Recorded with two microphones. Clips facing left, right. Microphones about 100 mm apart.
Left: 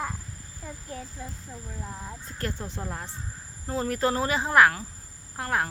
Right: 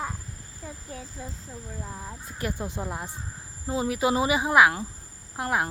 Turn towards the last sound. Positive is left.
turn(degrees=-15)  # may be behind; listen again after turning